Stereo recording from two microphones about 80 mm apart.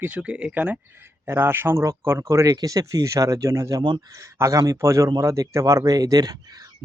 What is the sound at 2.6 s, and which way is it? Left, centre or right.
A man's voice, right.